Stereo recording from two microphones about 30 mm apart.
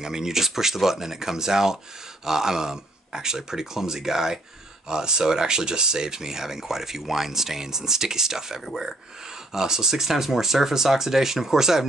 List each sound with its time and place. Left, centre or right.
0.0 s speech: centre
4.8 s speech: right